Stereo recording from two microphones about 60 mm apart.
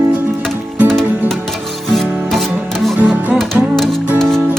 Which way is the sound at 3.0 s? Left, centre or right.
Right.